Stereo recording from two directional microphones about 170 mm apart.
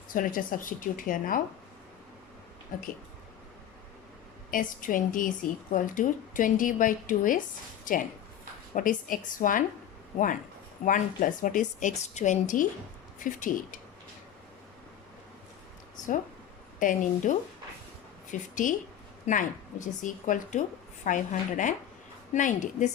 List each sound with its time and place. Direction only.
0.1 s a woman's voice: 55° left (ahead or behind)
2.7 s a woman's voice: 55° left (ahead or behind)
4.5 s a woman's voice: 50° left (ahead or behind)
10.8 s a woman's voice: 50° left (ahead or behind)
16.8 s a woman's voice: 50° left (ahead or behind)